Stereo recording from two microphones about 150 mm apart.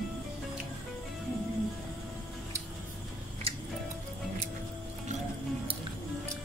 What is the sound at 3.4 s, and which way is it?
Music, 40° right (ahead or behind).